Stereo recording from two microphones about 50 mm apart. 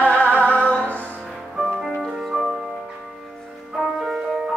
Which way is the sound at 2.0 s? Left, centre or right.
Centre.